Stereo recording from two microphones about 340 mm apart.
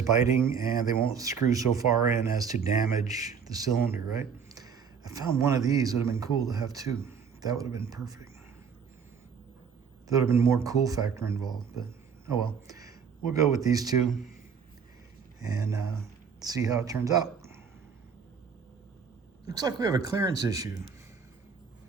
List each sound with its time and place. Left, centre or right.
0.2 s speech: centre
10.1 s speech: centre
14.1 s speech: left
15.4 s speech: centre
19.5 s speech: centre